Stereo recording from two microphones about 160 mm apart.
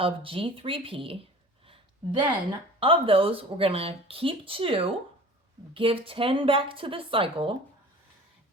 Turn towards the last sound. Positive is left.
turn(degrees=-35)  # may be behind; listen again after turning